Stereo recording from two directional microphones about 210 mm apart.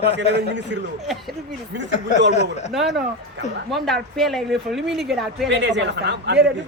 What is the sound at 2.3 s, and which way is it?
Speech, 35° left (ahead or behind).